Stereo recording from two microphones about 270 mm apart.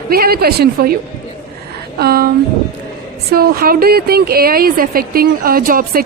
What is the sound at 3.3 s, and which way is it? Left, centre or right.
Speech, right.